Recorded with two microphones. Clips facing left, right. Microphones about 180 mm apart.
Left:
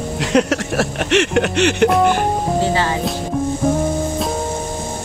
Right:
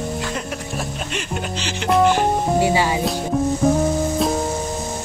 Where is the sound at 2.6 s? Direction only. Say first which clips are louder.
Right 1 dB; 10° right (ahead or behind).